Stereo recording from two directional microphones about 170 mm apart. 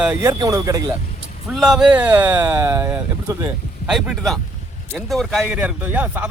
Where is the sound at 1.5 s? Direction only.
Centre (ahead or behind).